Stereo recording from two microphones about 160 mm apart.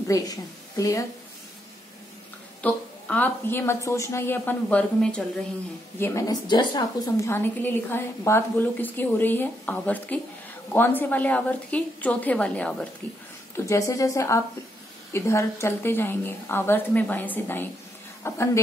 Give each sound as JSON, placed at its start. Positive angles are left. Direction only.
{"t": 0.1, "sound": "a woman's voice", "side_deg": 20}
{"t": 2.6, "sound": "a woman's voice", "side_deg": 10}
{"t": 13.7, "sound": "a woman's voice", "side_deg": 20}